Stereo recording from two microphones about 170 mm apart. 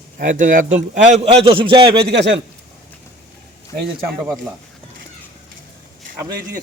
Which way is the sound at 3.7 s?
55° right (ahead or behind).